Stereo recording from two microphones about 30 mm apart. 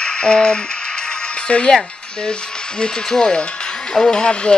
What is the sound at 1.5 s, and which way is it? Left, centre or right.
Speech, left.